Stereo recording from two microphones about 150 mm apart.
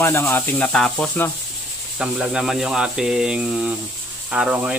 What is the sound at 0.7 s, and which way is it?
Speech, 5° left (ahead or behind).